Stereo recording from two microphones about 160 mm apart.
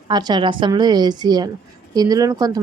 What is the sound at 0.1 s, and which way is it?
Speech, 25° right (ahead or behind).